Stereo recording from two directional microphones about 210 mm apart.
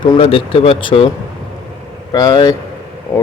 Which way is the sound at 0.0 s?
25° left (ahead or behind).